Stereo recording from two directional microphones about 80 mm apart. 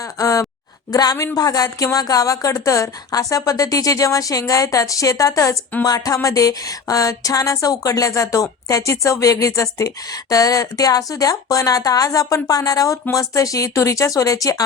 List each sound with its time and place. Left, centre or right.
0.2 s speech: left